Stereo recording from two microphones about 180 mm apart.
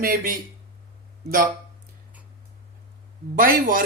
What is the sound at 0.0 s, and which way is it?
Speech, 50° right (ahead or behind).